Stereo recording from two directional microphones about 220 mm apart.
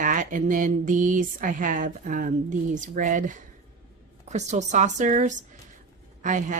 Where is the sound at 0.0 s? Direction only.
35° right (ahead or behind).